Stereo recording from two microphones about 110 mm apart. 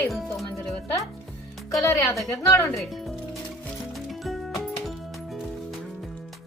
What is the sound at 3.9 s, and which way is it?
Music, centre (ahead or behind).